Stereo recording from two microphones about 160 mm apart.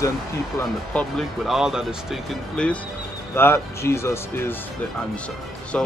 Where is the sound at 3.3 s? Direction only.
15° left (ahead or behind).